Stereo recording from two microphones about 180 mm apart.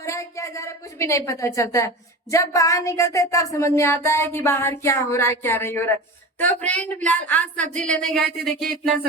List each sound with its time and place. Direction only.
0.0 s a woman's voice: 15° left (ahead or behind); by 8.8 s centre (ahead or behind)